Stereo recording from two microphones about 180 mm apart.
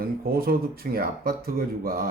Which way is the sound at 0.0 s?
55° right (ahead or behind).